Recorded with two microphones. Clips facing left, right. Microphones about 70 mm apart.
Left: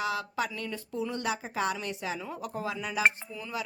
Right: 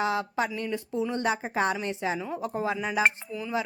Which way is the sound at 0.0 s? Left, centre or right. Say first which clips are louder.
Right 4 dB; right.